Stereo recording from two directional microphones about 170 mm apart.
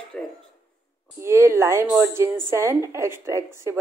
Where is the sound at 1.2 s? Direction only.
15° right (ahead or behind).